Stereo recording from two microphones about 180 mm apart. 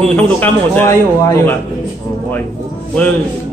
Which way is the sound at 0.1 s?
10° left (ahead or behind).